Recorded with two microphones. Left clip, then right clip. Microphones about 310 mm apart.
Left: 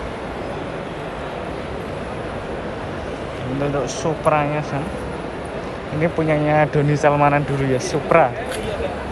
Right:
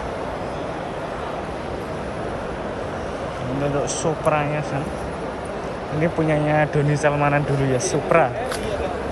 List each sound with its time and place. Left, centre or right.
4.0 s speech: centre
6.3 s speech: centre